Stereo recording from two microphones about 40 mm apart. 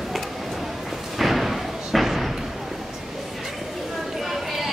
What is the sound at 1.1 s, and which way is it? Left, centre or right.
Thump, centre.